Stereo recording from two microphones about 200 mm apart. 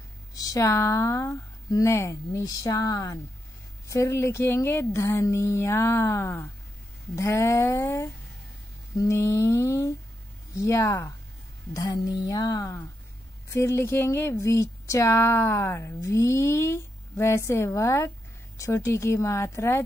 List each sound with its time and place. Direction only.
0.3 s a woman's voice: 15° left (ahead or behind)